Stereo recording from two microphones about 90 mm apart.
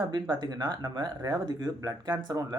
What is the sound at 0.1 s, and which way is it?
Speech, 50° right (ahead or behind).